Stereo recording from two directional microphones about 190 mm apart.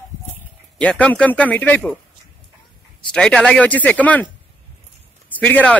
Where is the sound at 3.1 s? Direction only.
5° left (ahead or behind).